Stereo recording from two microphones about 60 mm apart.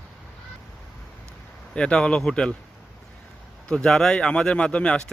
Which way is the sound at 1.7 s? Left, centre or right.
Centre.